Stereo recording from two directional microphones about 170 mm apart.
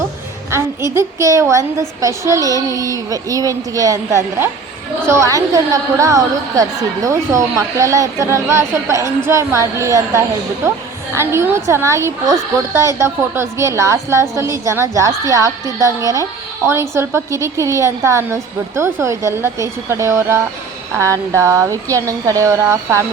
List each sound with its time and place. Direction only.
0.5 s a woman's voice: 15° right (ahead or behind)